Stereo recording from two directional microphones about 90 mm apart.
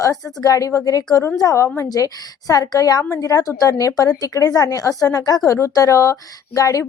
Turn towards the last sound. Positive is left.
turn(degrees=40)  # may be behind; listen again after turning